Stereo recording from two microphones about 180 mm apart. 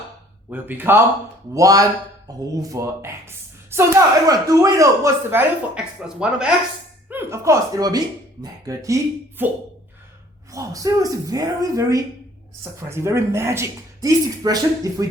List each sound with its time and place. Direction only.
0.5 s speech: 10° right (ahead or behind)